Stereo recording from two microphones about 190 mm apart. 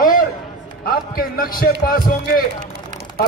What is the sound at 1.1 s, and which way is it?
A man's voice, 50° left (ahead or behind).